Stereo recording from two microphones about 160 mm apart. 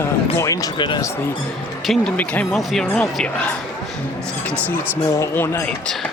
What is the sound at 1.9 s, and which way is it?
Speech, 5° left (ahead or behind).